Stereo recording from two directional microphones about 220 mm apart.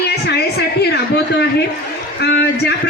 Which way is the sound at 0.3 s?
50° left (ahead or behind).